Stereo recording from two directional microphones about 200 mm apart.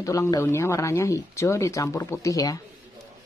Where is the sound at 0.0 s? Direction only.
15° left (ahead or behind).